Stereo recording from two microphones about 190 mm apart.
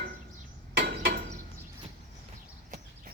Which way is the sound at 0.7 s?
55° right (ahead or behind).